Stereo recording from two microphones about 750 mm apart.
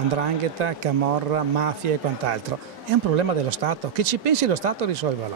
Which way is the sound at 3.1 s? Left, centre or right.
Right.